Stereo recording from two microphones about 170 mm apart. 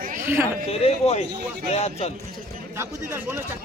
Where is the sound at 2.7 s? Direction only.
10° right (ahead or behind).